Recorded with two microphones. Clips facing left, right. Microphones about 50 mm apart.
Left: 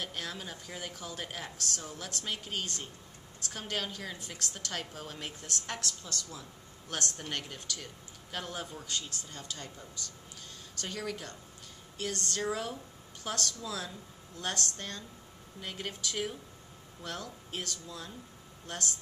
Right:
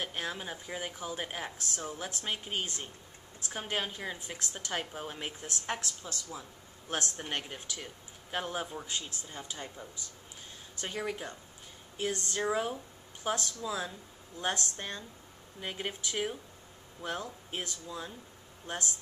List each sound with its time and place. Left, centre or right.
0.0 s a woman's voice: right